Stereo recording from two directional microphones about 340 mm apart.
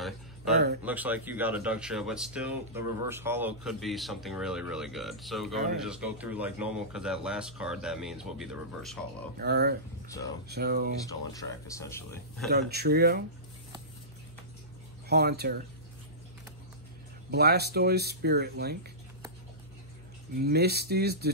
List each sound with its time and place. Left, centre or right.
0.8 s speech: centre
9.4 s speech: right
11.1 s speech: centre
12.4 s speech: right
15.0 s speech: right
17.3 s speech: right
20.3 s speech: right